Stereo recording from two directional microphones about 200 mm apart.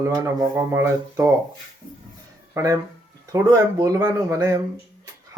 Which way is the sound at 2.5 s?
15° right (ahead or behind).